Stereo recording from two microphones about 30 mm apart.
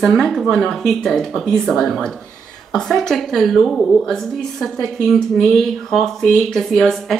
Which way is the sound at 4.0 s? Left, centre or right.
Left.